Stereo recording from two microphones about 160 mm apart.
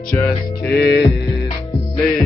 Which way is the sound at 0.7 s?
85° left.